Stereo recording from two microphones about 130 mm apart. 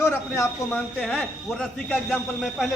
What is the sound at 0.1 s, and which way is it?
Speech, 20° left (ahead or behind).